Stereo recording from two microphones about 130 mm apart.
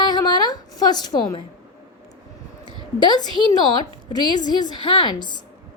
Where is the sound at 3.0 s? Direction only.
35° left (ahead or behind).